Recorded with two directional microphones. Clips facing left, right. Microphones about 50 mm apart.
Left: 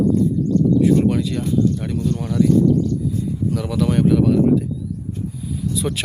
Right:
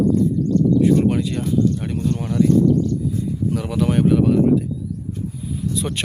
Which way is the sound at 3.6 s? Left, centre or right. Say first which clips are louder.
Even; centre.